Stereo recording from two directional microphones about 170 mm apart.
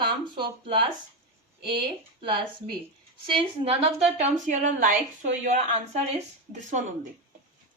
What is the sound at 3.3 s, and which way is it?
A woman's voice, 35° right (ahead or behind).